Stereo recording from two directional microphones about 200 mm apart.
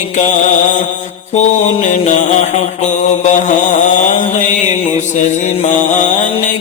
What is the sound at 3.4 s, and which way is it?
Mantra, 40° left (ahead or behind).